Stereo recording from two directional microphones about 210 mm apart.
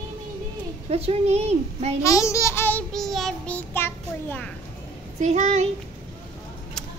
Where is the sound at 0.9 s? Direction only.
30° right (ahead or behind).